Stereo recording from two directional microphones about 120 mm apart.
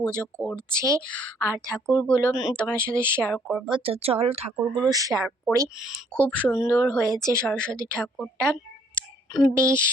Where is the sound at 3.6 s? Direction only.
50° right (ahead or behind).